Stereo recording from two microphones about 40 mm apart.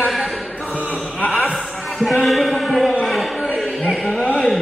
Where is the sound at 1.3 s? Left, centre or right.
Centre.